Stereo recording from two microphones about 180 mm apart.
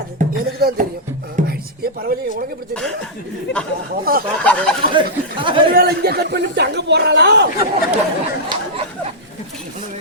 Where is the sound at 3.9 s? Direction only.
55° right (ahead or behind).